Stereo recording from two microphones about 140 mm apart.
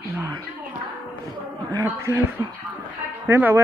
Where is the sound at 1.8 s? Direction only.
15° right (ahead or behind).